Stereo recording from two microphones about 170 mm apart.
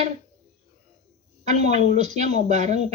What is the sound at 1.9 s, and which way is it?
Speech, 45° right (ahead or behind).